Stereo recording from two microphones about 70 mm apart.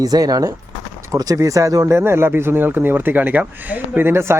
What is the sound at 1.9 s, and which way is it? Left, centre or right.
Speech, right.